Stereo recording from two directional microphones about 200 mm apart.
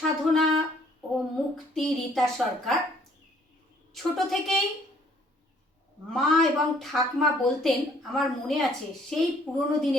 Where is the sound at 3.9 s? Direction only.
Centre (ahead or behind).